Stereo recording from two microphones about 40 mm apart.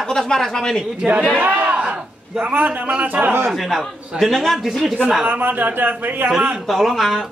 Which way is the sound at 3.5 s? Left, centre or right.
Centre.